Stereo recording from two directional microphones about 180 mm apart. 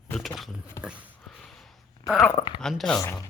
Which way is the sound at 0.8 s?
15° left (ahead or behind).